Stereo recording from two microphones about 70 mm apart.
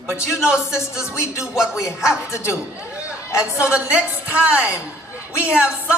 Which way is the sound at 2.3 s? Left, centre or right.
Left.